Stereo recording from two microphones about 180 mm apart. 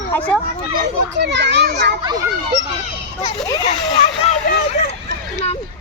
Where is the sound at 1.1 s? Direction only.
75° right (ahead or behind).